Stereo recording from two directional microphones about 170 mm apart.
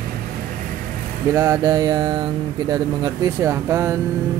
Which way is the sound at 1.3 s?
15° right (ahead or behind).